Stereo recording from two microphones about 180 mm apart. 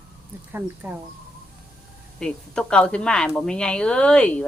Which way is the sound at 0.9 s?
15° right (ahead or behind).